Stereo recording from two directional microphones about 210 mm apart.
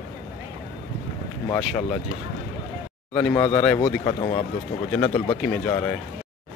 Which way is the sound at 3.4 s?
20° left (ahead or behind).